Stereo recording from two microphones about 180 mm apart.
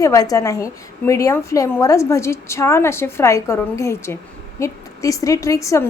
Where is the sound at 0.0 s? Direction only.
20° left (ahead or behind).